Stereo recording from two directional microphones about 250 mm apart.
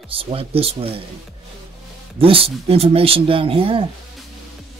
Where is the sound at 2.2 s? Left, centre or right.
Right.